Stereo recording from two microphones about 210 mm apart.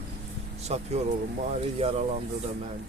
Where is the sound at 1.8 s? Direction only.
30° right (ahead or behind).